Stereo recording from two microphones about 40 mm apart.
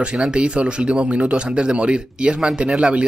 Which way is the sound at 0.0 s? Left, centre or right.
Right.